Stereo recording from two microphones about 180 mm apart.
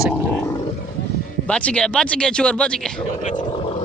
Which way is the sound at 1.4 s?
5° left (ahead or behind).